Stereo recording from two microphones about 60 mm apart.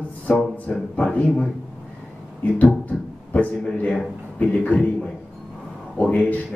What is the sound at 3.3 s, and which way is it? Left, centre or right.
Speech, left.